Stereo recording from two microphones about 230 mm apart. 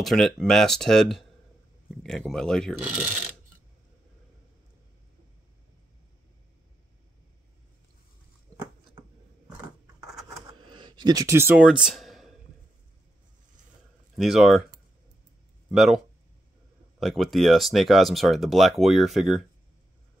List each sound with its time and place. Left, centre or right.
0.0 s speech: centre
10.7 s speech: centre
14.1 s speech: centre
15.7 s speech: centre
17.0 s speech: centre